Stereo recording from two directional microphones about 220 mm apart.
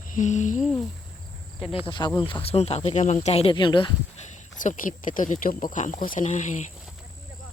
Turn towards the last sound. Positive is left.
turn(degrees=35)  # may be behind; listen again after turning